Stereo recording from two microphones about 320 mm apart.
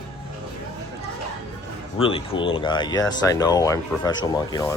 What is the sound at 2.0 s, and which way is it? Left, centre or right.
Speech, centre.